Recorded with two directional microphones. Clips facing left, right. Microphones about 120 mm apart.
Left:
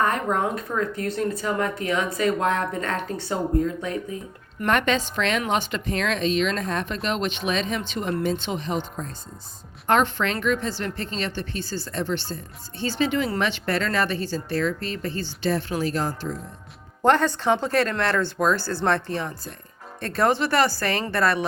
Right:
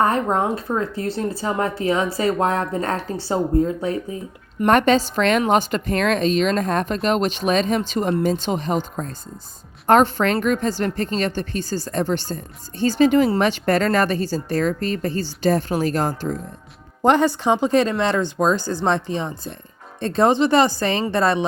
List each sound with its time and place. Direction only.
0.0 s speech: 30° right (ahead or behind)
9.8 s speech: 40° right (ahead or behind)
17.0 s speech: 15° right (ahead or behind)